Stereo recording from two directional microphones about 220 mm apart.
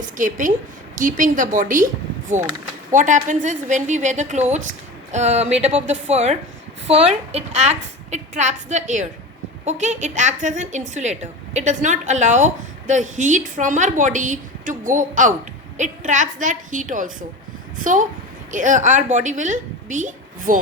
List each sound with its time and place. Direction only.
0.0 s a woman's voice: 35° right (ahead or behind)
2.9 s a woman's voice: 35° right (ahead or behind)